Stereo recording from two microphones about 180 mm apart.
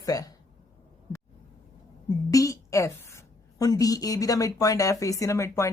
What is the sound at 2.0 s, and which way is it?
A woman's voice, 20° left (ahead or behind).